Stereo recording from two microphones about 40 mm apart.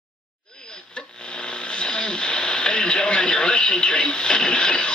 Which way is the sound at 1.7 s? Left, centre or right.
Left.